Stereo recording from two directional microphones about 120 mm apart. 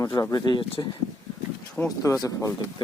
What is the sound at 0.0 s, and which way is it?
Speech, 30° left (ahead or behind).